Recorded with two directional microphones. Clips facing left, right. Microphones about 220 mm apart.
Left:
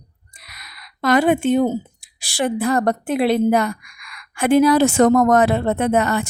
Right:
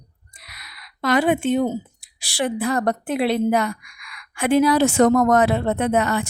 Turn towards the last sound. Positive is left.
turn(degrees=45)  # may be behind; listen again after turning